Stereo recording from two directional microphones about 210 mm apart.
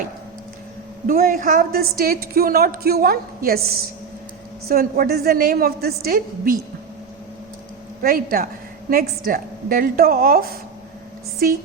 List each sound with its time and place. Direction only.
1.0 s a woman's voice: 45° right (ahead or behind)
4.7 s a woman's voice: 45° right (ahead or behind)
8.0 s a woman's voice: 45° right (ahead or behind)